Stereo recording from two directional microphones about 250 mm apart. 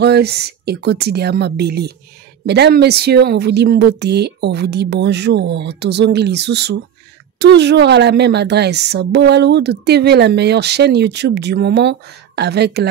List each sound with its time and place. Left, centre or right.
0.0 s a woman's voice: right